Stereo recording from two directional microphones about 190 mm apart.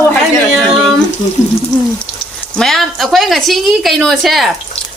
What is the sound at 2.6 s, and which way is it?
A woman's voice, centre (ahead or behind).